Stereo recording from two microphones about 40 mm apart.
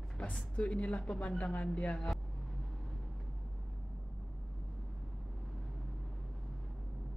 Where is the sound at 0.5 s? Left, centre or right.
Left.